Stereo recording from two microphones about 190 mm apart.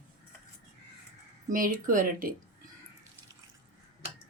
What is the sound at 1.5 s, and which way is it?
Speech, 45° right (ahead or behind).